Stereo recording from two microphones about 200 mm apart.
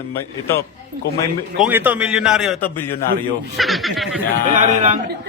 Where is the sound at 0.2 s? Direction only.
15° left (ahead or behind).